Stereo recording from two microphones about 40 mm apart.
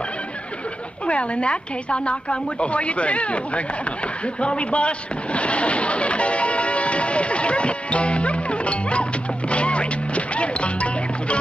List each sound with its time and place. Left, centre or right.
1.0 s a woman's voice: left
9.5 s music: left